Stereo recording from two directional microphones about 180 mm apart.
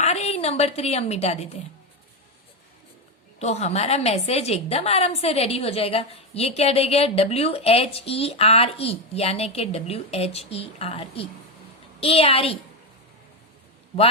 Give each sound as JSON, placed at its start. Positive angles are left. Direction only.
{"t": 0.0, "sound": "a woman's voice", "side_deg": 35}
{"t": 3.3, "sound": "a woman's voice", "side_deg": 35}